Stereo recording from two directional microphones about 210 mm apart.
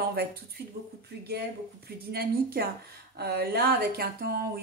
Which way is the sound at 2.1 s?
45° right (ahead or behind).